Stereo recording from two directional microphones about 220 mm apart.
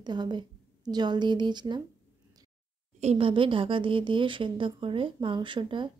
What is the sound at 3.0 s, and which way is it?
Speech, 25° right (ahead or behind).